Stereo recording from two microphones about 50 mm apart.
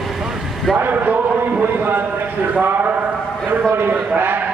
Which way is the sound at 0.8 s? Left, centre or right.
Right.